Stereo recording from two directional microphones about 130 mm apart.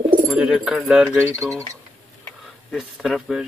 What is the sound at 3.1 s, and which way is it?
Speech, 5° right (ahead or behind).